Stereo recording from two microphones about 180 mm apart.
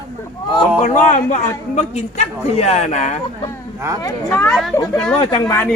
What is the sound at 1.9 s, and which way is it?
A woman's voice, 35° left (ahead or behind).